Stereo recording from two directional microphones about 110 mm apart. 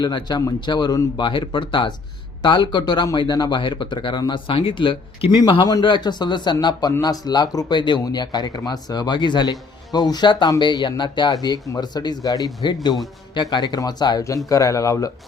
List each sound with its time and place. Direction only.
0.0 s a man's voice: 40° left (ahead or behind)